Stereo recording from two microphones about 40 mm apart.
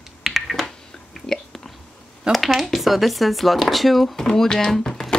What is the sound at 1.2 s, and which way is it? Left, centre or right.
Whispering, centre.